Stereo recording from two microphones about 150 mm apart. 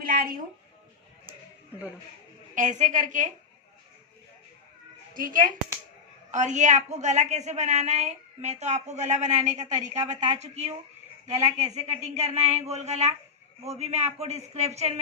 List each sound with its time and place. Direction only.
0.1 s speech: 70° right (ahead or behind)
2.6 s a woman's voice: 55° right (ahead or behind)
5.1 s a woman's voice: 65° right (ahead or behind)
6.3 s a woman's voice: 55° right (ahead or behind)